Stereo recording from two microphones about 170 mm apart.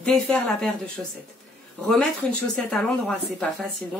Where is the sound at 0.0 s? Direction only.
5° left (ahead or behind).